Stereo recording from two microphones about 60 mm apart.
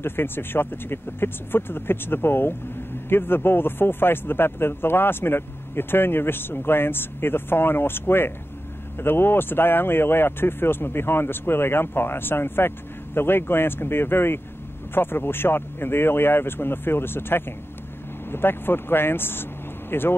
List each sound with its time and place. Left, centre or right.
0.0 s speech: left